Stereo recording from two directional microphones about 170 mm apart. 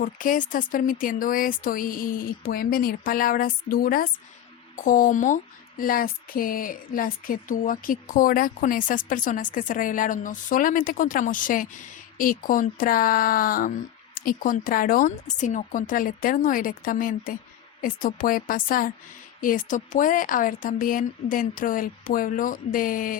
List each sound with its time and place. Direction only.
0.0 s speech: 50° left (ahead or behind)